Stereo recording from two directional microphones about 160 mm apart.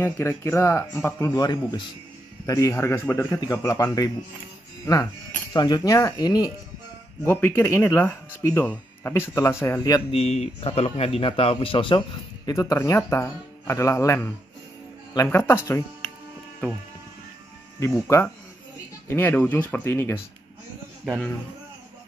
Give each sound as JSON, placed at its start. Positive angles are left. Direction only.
{"t": 0.0, "sound": "speech", "side_deg": 15}
{"t": 7.2, "sound": "speech", "side_deg": 15}
{"t": 10.1, "sound": "speech", "side_deg": 40}
{"t": 12.5, "sound": "speech", "side_deg": 20}
{"t": 17.7, "sound": "speech", "side_deg": 15}
{"t": 21.0, "sound": "speech", "side_deg": 5}